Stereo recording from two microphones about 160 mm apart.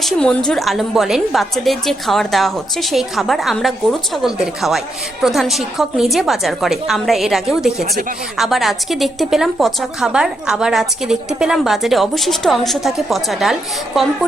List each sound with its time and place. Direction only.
0.0 s a woman's voice: 5° left (ahead or behind)